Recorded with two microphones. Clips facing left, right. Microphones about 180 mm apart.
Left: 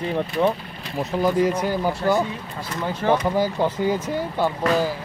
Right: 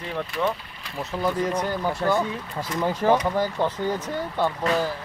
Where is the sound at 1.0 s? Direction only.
10° left (ahead or behind).